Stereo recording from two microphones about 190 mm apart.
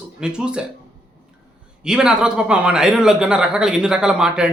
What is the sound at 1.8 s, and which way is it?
A man's voice, 5° right (ahead or behind).